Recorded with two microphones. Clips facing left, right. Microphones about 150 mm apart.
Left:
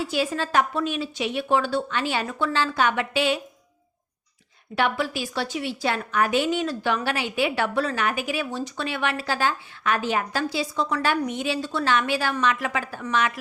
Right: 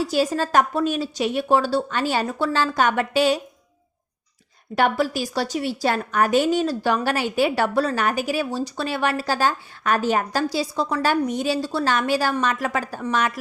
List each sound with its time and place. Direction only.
0.0 s a woman's voice: 40° right (ahead or behind)
4.7 s a woman's voice: 40° right (ahead or behind)